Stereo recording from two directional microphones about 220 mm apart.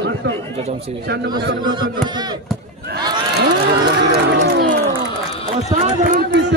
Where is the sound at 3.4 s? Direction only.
50° right (ahead or behind).